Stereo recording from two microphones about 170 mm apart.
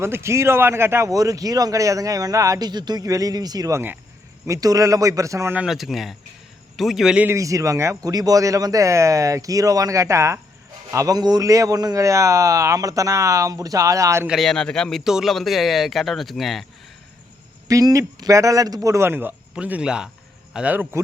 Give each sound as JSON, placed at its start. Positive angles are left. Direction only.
{"t": 0.0, "sound": "speech", "side_deg": -15}
{"t": 5.6, "sound": "speech", "side_deg": 0}
{"t": 7.3, "sound": "speech", "side_deg": -20}
{"t": 14.3, "sound": "speech", "side_deg": 0}
{"t": 17.7, "sound": "speech", "side_deg": -20}